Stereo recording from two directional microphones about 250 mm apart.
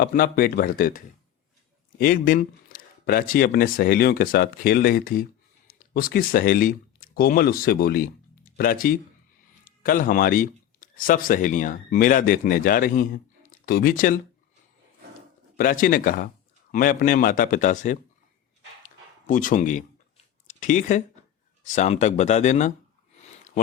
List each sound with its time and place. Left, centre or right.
0.0 s speech: left
15.5 s speech: left
19.3 s speech: left